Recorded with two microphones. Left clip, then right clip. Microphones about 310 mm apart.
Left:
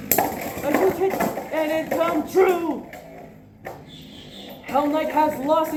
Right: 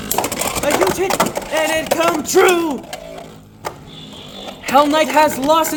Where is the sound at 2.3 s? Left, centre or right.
Right.